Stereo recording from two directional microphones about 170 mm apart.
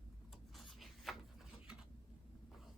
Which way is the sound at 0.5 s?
Centre (ahead or behind).